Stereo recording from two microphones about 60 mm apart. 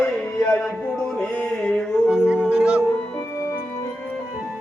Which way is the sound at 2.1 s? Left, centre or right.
Right.